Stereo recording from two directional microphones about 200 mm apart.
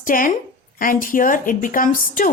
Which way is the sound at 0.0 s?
40° left (ahead or behind).